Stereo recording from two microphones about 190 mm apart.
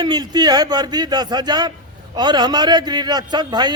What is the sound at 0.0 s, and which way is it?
A man's voice, 20° right (ahead or behind).